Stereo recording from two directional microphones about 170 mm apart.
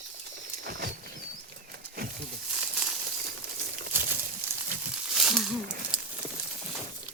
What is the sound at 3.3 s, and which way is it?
Crumpling, 75° right (ahead or behind).